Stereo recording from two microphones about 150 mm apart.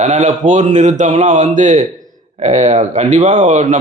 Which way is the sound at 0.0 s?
50° right (ahead or behind).